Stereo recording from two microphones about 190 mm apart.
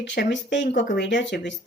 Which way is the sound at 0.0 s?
65° left (ahead or behind).